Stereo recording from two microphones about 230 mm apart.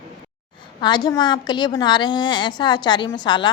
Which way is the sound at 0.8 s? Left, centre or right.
Centre.